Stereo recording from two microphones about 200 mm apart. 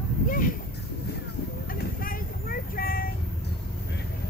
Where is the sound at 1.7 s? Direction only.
45° left (ahead or behind).